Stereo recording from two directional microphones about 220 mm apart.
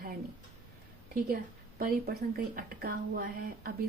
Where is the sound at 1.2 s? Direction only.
40° right (ahead or behind).